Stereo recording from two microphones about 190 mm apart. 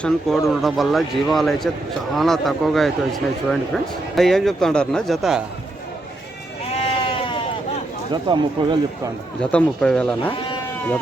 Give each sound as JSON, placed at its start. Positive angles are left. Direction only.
{"t": 0.0, "sound": "a man's voice", "side_deg": 0}
{"t": 6.7, "sound": "bleat", "side_deg": 30}
{"t": 8.1, "sound": "speech", "side_deg": -25}
{"t": 9.4, "sound": "a man's voice", "side_deg": 5}